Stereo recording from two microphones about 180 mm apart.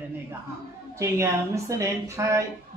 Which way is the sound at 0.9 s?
15° right (ahead or behind).